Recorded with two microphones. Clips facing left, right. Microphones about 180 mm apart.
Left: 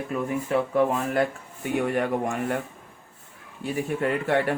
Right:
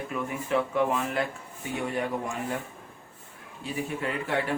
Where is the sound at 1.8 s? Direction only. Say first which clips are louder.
Left 4 dB; 50° left (ahead or behind).